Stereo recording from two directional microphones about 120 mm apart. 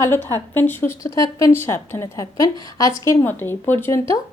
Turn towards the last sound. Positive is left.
turn(degrees=25)  # may be behind; listen again after turning